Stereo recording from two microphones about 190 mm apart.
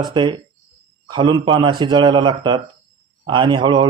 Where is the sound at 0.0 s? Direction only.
25° right (ahead or behind).